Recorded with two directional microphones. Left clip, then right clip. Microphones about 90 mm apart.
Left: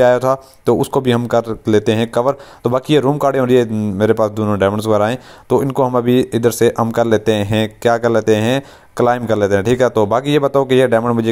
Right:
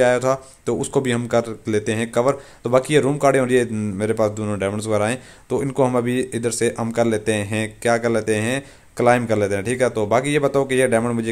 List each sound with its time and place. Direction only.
0.0 s speech: 45° left (ahead or behind)